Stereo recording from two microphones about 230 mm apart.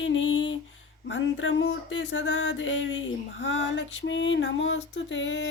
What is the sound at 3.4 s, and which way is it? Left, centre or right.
Female singing, left.